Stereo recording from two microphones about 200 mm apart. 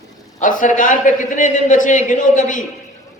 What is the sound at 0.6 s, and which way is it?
A man's voice, 40° left (ahead or behind).